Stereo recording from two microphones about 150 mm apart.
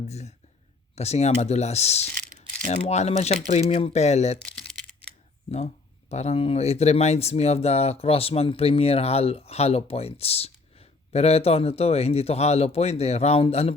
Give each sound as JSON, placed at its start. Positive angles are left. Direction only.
{"t": 0.1, "sound": "speech", "side_deg": 45}
{"t": 5.5, "sound": "speech", "side_deg": 45}